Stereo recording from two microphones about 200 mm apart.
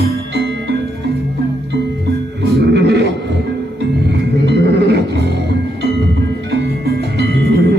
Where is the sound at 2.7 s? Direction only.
60° right (ahead or behind).